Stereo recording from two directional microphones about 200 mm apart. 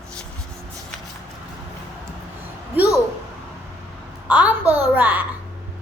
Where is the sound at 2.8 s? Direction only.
10° right (ahead or behind).